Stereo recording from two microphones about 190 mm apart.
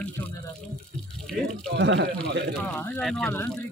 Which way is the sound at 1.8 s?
70° right (ahead or behind).